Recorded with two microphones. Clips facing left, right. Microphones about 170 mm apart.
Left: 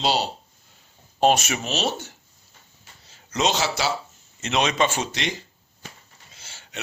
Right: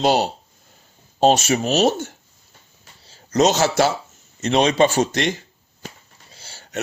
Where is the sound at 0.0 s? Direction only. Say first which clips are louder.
Right 6 dB; 50° right (ahead or behind).